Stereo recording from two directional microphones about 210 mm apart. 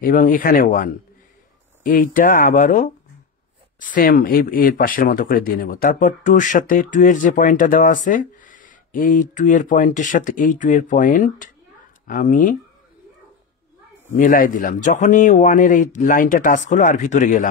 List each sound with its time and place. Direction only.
0.0 s speech: 40° left (ahead or behind)
14.1 s speech: 40° left (ahead or behind)